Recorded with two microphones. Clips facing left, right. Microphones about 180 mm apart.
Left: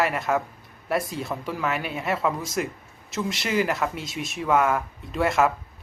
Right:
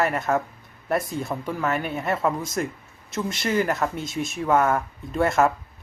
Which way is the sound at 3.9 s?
50° right (ahead or behind).